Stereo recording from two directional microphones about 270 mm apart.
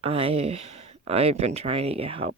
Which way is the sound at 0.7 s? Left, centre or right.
Right.